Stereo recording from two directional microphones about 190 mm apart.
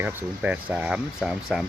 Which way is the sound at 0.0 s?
10° right (ahead or behind).